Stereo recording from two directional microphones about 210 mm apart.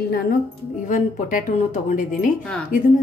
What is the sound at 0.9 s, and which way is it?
A woman's voice, 35° left (ahead or behind).